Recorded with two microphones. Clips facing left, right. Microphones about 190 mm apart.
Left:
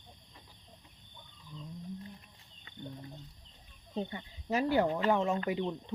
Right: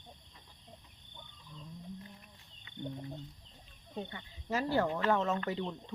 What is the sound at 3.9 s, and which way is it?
Speech, 20° left (ahead or behind).